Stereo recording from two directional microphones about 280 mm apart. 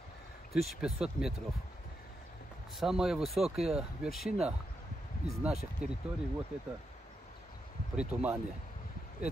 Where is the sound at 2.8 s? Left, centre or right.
Centre.